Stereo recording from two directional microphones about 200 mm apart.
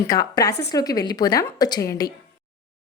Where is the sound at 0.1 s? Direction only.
20° left (ahead or behind).